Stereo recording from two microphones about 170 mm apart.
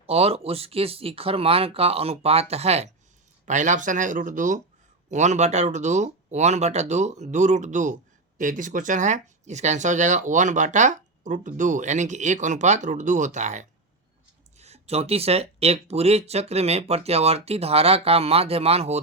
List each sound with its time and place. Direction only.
0.1 s speech: 35° right (ahead or behind)